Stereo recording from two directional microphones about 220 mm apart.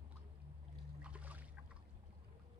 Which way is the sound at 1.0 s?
5° right (ahead or behind).